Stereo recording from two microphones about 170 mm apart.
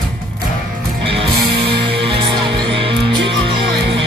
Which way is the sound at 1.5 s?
85° right.